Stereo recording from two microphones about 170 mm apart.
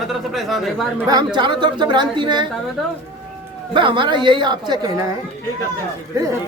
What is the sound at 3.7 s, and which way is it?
Speech, 30° right (ahead or behind).